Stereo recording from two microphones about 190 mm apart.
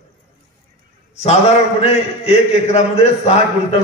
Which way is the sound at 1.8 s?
35° left (ahead or behind).